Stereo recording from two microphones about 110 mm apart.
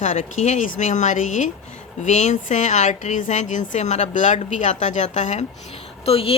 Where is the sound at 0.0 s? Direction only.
90° left.